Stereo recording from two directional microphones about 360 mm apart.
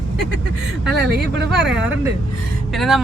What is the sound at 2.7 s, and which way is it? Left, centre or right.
Speech, centre.